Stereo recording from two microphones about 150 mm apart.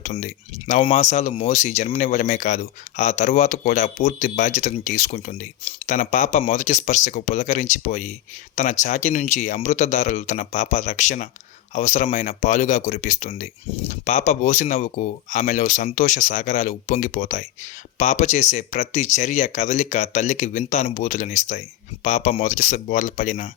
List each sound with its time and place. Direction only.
0.0 s speech: 60° left (ahead or behind)